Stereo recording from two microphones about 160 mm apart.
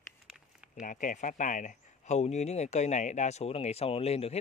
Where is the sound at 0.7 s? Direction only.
55° left (ahead or behind).